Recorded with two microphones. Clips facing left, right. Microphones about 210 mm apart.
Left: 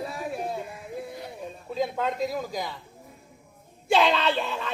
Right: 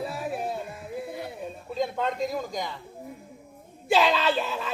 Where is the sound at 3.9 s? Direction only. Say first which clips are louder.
Even; 5° right (ahead or behind).